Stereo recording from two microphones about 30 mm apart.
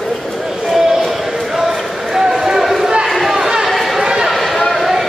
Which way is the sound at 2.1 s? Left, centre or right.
Centre.